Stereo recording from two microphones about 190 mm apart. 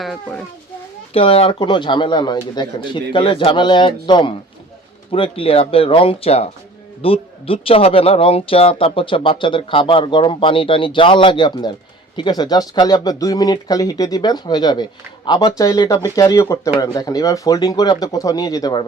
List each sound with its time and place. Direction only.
0.0 s a child's voice: centre (ahead or behind)
1.1 s speech: 30° left (ahead or behind)